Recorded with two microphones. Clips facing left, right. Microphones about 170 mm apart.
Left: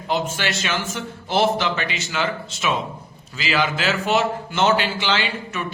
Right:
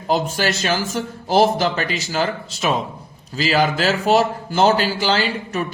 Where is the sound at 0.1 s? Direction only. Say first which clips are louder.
Right 4 dB; 40° right (ahead or behind).